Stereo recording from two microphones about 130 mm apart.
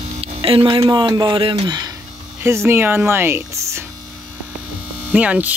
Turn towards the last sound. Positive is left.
turn(degrees=-10)  # may be behind; listen again after turning